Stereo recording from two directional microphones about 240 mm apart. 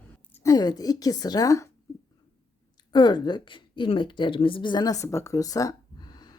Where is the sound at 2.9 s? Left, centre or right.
Centre.